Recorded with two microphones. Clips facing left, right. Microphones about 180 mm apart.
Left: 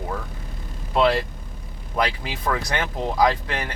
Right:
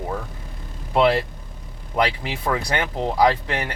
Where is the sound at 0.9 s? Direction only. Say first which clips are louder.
Right 2 dB; 20° right (ahead or behind).